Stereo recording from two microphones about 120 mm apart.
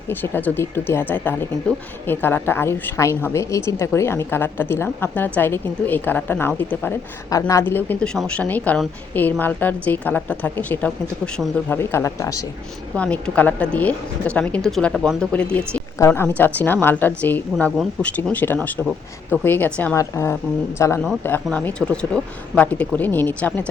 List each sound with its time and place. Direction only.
0.1 s a woman's voice: 15° left (ahead or behind)
7.3 s speech: 30° left (ahead or behind)
7.7 s a woman's voice: 15° left (ahead or behind)
8.0 s a woman's voice: 5° left (ahead or behind); by 12.4 s 25° left (ahead or behind)
13.0 s a woman's voice: 10° left (ahead or behind)
16.0 s a woman's voice: 20° left (ahead or behind)